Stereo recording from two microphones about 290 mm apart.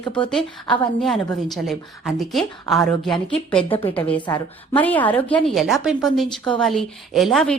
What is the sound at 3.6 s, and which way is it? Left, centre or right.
Speech, centre.